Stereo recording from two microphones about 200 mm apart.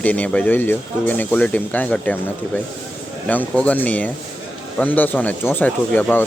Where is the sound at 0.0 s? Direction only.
5° left (ahead or behind).